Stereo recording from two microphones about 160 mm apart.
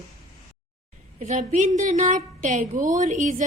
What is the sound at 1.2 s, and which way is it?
A woman's voice, 45° right (ahead or behind).